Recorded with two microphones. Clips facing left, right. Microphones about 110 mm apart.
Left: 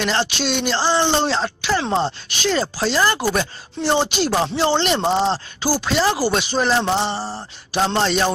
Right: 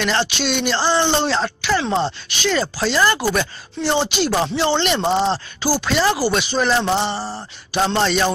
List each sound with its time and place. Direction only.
0.0 s speech: 35° left (ahead or behind)
1.9 s mantra: 15° left (ahead or behind)
2.2 s speech: 35° left (ahead or behind)
6.2 s speech: 45° left (ahead or behind)
6.8 s mantra: 10° left (ahead or behind)
7.7 s speech: 35° left (ahead or behind)